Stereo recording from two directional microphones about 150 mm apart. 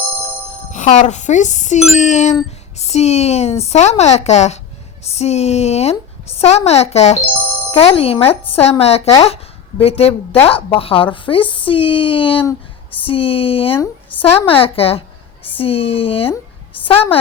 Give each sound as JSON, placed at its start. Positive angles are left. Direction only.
{"t": 0.7, "sound": "a woman's voice", "side_deg": 55}